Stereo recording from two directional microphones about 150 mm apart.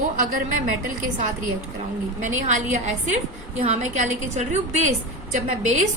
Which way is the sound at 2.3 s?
55° right (ahead or behind).